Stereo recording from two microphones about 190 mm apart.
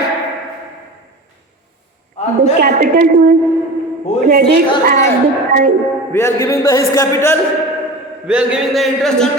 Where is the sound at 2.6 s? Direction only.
50° right (ahead or behind).